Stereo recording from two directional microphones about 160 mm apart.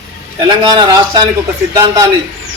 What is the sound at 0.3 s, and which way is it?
Speech, 30° right (ahead or behind).